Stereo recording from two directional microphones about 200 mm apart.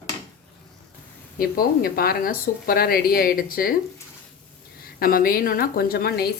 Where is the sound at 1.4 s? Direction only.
50° left (ahead or behind).